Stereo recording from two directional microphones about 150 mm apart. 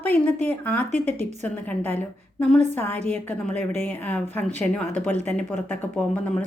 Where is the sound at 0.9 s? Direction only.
45° right (ahead or behind).